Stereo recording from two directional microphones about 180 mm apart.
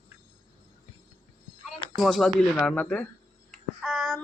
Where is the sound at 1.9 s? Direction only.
Centre (ahead or behind).